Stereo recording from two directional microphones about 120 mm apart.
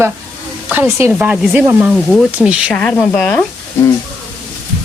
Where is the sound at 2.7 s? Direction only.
10° left (ahead or behind).